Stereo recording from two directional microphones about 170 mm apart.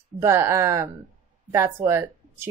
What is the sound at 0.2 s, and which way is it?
Speech, 15° right (ahead or behind).